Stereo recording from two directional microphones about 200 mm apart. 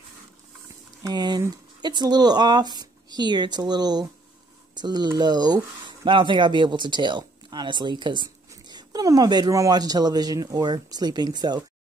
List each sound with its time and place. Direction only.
1.0 s speech: 20° right (ahead or behind)